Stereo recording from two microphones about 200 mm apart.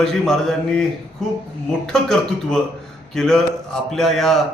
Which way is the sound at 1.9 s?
Centre (ahead or behind).